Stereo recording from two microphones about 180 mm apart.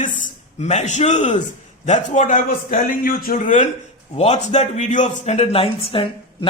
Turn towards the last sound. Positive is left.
turn(degrees=30)  # may be behind; listen again after turning